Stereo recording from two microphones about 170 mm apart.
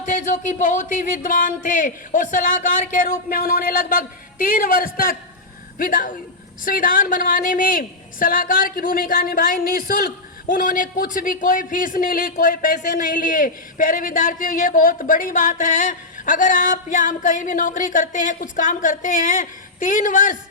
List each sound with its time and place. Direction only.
0.0 s a man's voice: 45° left (ahead or behind)